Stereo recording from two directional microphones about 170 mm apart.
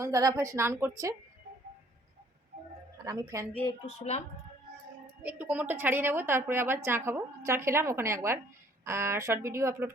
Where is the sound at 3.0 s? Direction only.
20° right (ahead or behind).